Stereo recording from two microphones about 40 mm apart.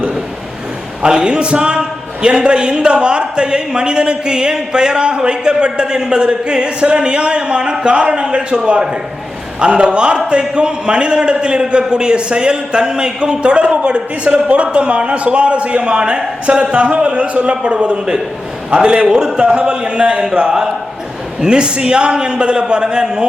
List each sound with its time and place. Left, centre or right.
1.0 s speech: right